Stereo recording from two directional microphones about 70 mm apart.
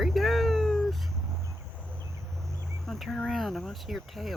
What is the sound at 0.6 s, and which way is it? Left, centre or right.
Cat, centre.